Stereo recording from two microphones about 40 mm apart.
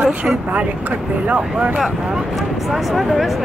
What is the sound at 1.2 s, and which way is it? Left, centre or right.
Speech, right.